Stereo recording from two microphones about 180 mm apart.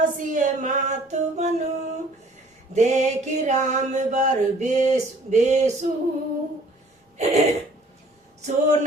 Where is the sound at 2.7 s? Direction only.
40° right (ahead or behind).